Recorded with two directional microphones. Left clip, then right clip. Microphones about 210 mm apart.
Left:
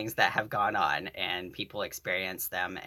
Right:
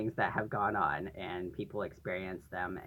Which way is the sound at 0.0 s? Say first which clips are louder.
Left 6 dB; 50° left (ahead or behind).